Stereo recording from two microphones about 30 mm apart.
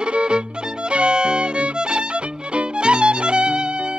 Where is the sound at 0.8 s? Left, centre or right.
Right.